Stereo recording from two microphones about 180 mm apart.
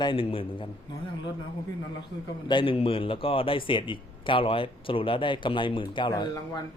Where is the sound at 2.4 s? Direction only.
30° left (ahead or behind).